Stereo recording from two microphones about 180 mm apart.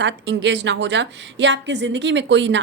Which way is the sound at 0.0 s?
80° right.